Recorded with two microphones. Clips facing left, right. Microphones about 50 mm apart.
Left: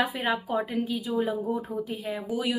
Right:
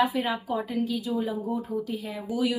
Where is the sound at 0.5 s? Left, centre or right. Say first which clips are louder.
Even; left.